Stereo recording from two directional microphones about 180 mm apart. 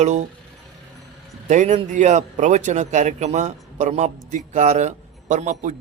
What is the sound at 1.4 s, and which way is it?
A man's voice, 40° right (ahead or behind).